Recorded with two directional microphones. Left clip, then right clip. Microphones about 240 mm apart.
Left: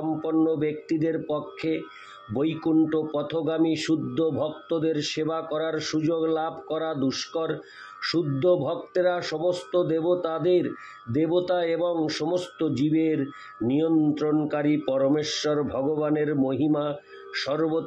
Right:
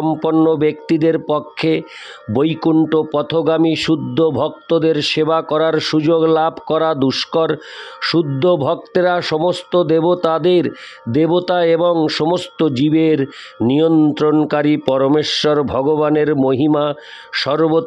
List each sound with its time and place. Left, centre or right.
0.2 s speech: right